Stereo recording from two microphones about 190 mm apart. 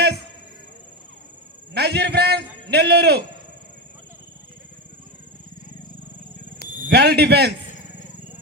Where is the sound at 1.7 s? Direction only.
60° right (ahead or behind).